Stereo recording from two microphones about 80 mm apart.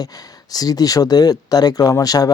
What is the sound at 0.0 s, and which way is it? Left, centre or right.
Speech, left.